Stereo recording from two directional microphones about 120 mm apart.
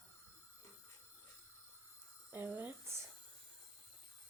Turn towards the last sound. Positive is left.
turn(degrees=-20)  # may be behind; listen again after turning